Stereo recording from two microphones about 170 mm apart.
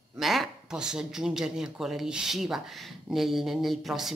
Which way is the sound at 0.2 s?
Centre (ahead or behind).